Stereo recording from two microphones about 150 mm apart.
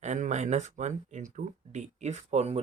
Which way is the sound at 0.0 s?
55° right (ahead or behind).